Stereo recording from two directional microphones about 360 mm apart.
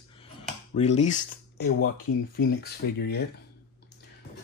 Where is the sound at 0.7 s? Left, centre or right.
Centre.